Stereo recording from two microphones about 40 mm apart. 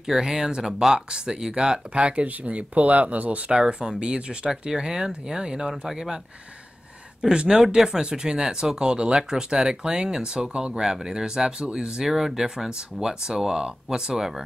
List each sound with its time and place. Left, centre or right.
0.0 s speech: centre; by 3.5 s right
3.5 s speech: centre
5.7 s speech: centre
7.2 s speech: centre
12.0 s speech: centre